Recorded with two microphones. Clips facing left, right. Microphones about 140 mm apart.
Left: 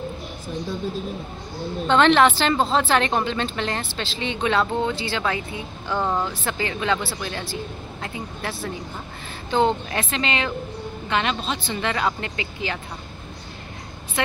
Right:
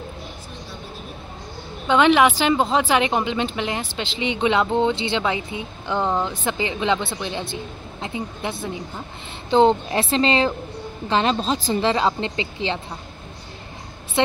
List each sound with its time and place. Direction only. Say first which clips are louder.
1.9 s a woman's voice: right 1 dB; 10° right (ahead or behind); by 12.8 s 25° right (ahead or behind)
14.2 s a woman's voice: right 5 dB; 25° right (ahead or behind)